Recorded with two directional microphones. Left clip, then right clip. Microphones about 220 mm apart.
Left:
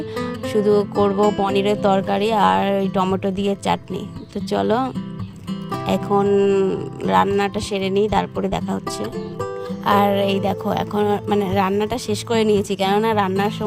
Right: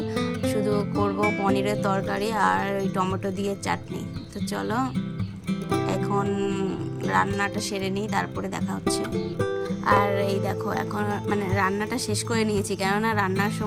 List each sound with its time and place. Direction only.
0.2 s music: 30° left (ahead or behind)
4.5 s music: 30° left (ahead or behind)